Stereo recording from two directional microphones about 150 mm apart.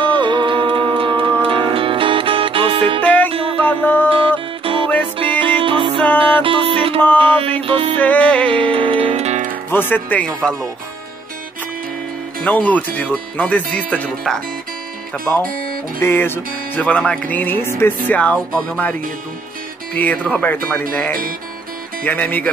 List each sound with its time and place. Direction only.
0.0 s music: 30° right (ahead or behind)
3.0 s music: 10° left (ahead or behind)
3.3 s music: 40° right (ahead or behind)
4.7 s music: 35° right (ahead or behind)
7.0 s music: 10° left (ahead or behind)
7.6 s music: 35° right (ahead or behind)
8.0 s music: 10° left (ahead or behind)
8.7 s music: 40° right (ahead or behind)
9.7 s music: 15° left (ahead or behind)
12.4 s music: 10° left (ahead or behind)